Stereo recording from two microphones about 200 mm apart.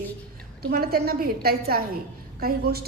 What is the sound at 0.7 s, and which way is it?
A woman's voice, 50° right (ahead or behind).